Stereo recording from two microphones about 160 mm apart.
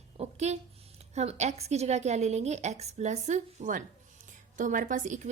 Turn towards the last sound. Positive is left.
turn(degrees=-50)  # may be behind; listen again after turning